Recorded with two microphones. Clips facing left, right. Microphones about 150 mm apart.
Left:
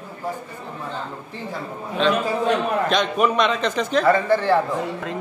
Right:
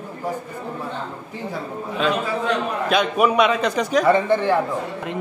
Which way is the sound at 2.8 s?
5° right (ahead or behind).